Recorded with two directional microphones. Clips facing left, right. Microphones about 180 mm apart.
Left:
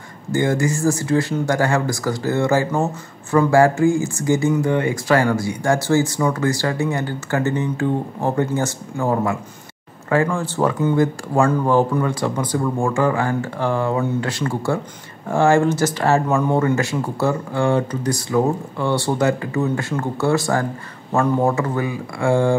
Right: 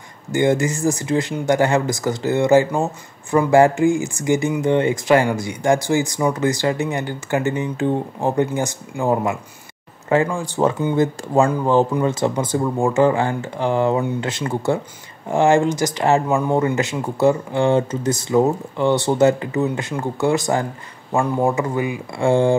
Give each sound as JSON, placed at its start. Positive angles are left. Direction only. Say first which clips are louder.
{"t": 0.3, "sound": "speech", "louder": "right 1 dB", "side_deg": -20}